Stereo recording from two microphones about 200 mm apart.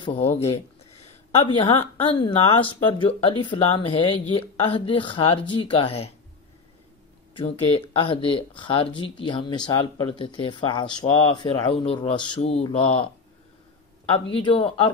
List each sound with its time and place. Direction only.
0.0 s a woman's voice: 30° left (ahead or behind)
7.3 s a woman's voice: 30° left (ahead or behind)
14.1 s a woman's voice: 25° left (ahead or behind)